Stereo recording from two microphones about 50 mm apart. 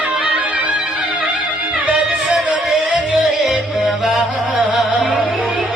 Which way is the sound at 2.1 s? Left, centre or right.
Centre.